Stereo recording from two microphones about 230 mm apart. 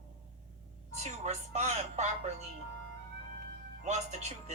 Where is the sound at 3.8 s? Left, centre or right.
Right.